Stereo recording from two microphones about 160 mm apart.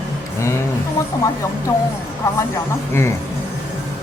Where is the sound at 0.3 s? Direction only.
15° left (ahead or behind).